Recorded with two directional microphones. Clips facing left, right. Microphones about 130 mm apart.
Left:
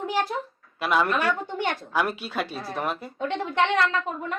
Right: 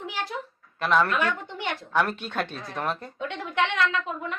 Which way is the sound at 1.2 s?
50° left (ahead or behind).